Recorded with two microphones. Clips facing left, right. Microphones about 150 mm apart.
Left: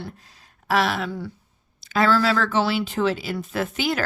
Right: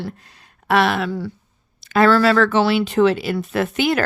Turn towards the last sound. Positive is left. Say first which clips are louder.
# right 5 dB
turn(degrees=-65)  # may be behind; listen again after turning